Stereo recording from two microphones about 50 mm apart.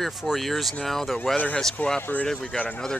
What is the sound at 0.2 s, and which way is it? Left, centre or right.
Speech, centre.